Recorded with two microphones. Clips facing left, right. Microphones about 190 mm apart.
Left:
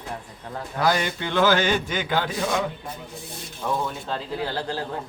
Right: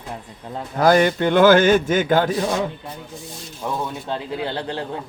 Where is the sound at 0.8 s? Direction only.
50° right (ahead or behind).